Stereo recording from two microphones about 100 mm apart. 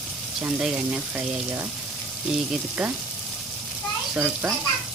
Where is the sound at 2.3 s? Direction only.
5° right (ahead or behind).